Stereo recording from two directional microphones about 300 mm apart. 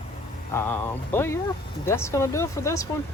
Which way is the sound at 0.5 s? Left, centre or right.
Centre.